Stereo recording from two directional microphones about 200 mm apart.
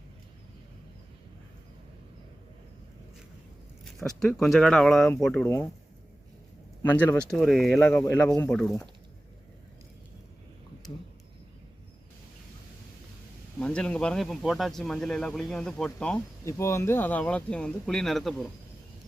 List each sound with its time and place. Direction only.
3.8 s speech: centre (ahead or behind)
6.8 s speech: 10° left (ahead or behind)
13.6 s speech: 5° left (ahead or behind)